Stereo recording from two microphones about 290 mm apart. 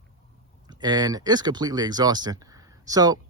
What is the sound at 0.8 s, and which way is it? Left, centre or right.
Speech, centre.